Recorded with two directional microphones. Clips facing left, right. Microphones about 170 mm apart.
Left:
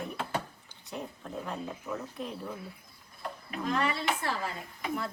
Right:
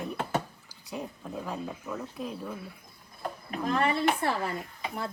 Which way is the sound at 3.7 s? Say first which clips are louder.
Right 5 dB; 50° right (ahead or behind).